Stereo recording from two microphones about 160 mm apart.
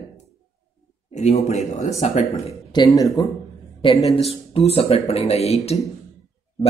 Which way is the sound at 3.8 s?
35° left (ahead or behind).